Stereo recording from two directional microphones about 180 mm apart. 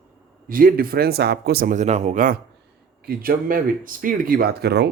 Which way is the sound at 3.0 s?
55° right (ahead or behind).